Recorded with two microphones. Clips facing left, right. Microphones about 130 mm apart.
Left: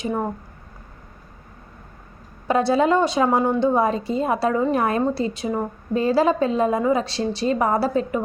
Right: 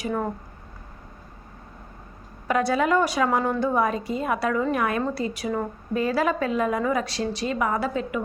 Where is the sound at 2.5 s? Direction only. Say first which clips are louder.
Left 4 dB; 30° left (ahead or behind).